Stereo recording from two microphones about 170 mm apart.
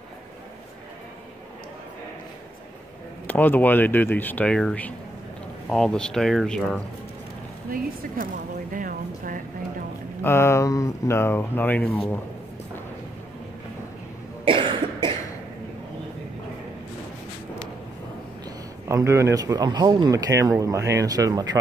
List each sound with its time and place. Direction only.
3.3 s speech: 10° left (ahead or behind)
8.7 s speech: 55° right (ahead or behind)
10.2 s speech: 15° left (ahead or behind)
14.4 s cough: 30° right (ahead or behind)
18.9 s speech: 15° right (ahead or behind)